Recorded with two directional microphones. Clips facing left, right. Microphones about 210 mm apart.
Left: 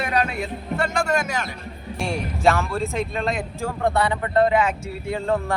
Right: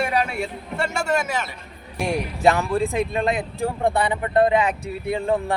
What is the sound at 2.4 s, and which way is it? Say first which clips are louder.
Speech: right 2 dB; 15° right (ahead or behind).